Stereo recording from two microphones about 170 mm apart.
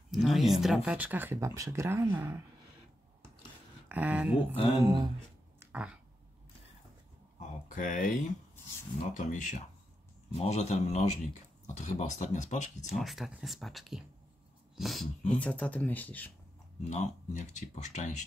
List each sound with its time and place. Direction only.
0.1 s speech: centre (ahead or behind)
3.9 s speech: 10° right (ahead or behind)
4.8 s speech: 20° right (ahead or behind)
5.6 s a sound: 10° right (ahead or behind)
7.3 s a sound: 50° left (ahead or behind)
9.0 s a man's voice: 45° left (ahead or behind)
12.8 s speech: centre (ahead or behind)
16.9 s speech: 45° left (ahead or behind)